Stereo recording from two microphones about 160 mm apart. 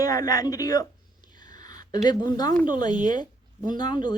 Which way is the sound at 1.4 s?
25° left (ahead or behind).